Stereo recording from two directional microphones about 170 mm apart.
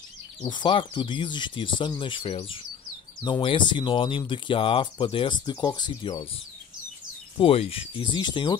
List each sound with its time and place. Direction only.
0.4 s speech: 25° left (ahead or behind)
7.3 s speech: 35° left (ahead or behind)